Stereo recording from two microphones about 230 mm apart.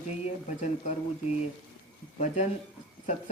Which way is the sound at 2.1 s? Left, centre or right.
Left.